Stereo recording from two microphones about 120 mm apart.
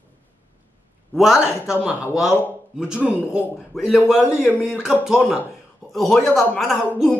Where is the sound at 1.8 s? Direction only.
5° right (ahead or behind).